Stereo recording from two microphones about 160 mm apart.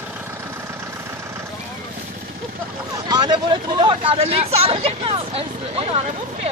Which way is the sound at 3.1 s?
25° right (ahead or behind).